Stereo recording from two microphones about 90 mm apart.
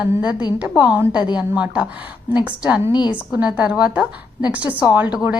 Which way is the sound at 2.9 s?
55° left (ahead or behind).